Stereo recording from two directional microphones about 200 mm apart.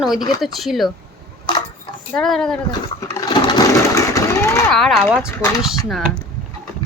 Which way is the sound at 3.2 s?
20° left (ahead or behind).